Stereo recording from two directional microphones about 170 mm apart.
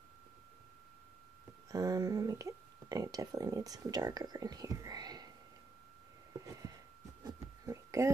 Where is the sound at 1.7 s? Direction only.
20° right (ahead or behind).